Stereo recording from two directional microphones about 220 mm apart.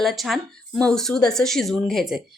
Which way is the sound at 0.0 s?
Centre (ahead or behind).